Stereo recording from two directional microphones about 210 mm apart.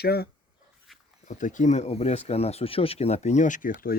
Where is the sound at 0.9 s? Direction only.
Centre (ahead or behind).